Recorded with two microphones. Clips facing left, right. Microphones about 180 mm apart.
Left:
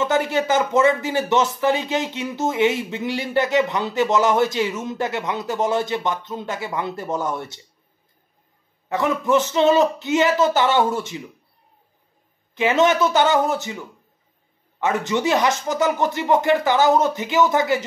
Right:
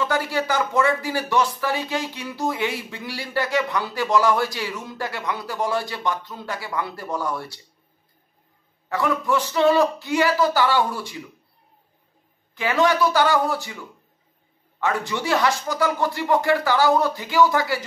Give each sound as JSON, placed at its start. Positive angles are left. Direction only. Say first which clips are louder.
{"t": 0.0, "sound": "speech", "louder": "left 3 dB", "side_deg": 20}
{"t": 8.8, "sound": "speech", "louder": "left 2 dB", "side_deg": 20}
{"t": 12.5, "sound": "speech", "louder": "left 3 dB", "side_deg": 20}